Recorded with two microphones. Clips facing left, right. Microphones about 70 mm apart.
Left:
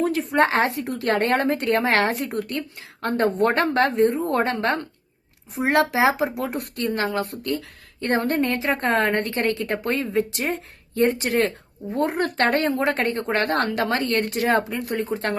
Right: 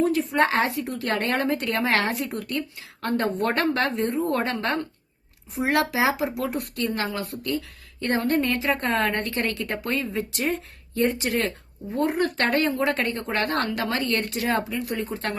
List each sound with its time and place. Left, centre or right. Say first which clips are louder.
0.0 s a woman's voice: left 1 dB; left